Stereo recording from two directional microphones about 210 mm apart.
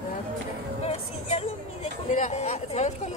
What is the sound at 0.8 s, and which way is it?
Music, 30° left (ahead or behind).